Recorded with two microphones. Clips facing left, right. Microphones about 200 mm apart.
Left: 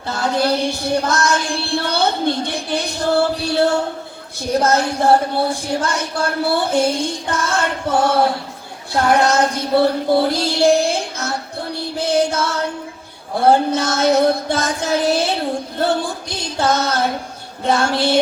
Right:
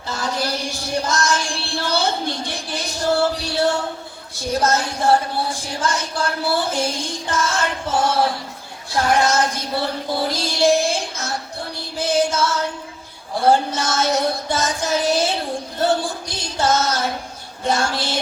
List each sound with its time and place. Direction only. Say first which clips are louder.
0.1 s music: left 6 dB; 60° left (ahead or behind)
4.6 s a sound: left 3 dB; 60° left (ahead or behind)
8.9 s child singing: left 3 dB; 60° left (ahead or behind)
11.9 s music: left 1 dB; 60° left (ahead or behind)
16.3 s music: left 1 dB; 60° left (ahead or behind)